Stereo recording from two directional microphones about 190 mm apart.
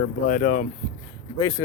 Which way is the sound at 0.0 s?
40° left (ahead or behind).